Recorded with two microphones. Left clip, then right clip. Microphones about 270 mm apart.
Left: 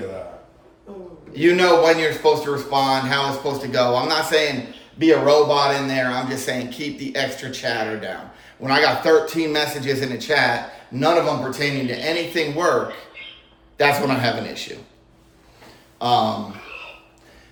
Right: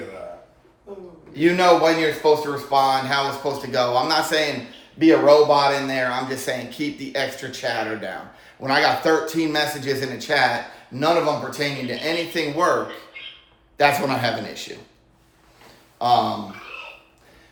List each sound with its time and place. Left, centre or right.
1.3 s speech: centre
13.7 s speech: centre
16.0 s speech: centre